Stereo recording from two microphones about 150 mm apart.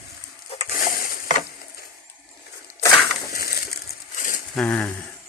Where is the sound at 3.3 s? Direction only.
90° left.